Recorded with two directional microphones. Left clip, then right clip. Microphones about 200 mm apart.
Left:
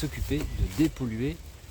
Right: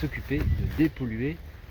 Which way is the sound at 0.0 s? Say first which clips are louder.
Right 1 dB; 20° left (ahead or behind).